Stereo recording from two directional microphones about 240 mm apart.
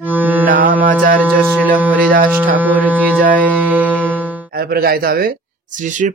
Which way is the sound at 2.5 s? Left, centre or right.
Centre.